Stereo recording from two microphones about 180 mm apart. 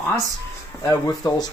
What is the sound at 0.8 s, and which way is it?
Speech, 20° left (ahead or behind).